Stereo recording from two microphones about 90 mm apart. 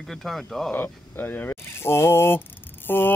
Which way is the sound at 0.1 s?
Centre (ahead or behind).